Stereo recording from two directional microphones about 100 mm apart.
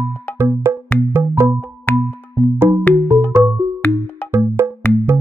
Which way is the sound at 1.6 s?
15° left (ahead or behind).